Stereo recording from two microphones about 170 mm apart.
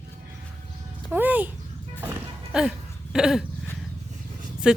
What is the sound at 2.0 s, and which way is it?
Music, 10° right (ahead or behind).